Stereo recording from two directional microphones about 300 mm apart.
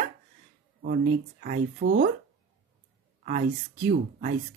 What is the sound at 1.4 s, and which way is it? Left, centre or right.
Speech, right.